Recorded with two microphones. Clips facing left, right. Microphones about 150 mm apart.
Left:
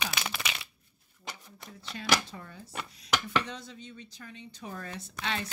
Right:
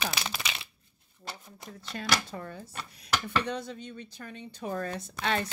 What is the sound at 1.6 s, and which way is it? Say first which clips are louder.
Speech: right 2 dB; 50° right (ahead or behind).